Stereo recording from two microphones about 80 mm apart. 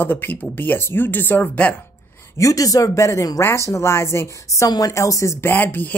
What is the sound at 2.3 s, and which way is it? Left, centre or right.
Speech, left.